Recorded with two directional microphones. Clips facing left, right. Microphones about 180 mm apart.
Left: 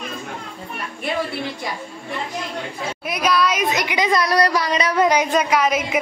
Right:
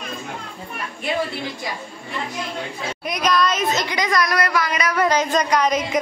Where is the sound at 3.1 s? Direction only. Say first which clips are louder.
Even; 10° left (ahead or behind).